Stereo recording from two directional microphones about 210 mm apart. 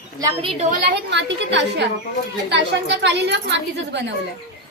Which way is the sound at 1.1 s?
55° right (ahead or behind).